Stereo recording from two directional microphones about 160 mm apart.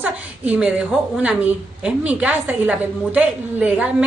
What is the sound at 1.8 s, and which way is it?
A woman's voice, 5° right (ahead or behind).